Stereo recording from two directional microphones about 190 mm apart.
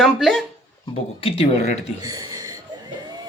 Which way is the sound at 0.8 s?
30° left (ahead or behind).